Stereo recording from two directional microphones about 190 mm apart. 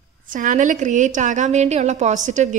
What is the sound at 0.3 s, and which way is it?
A woman's voice, 45° right (ahead or behind).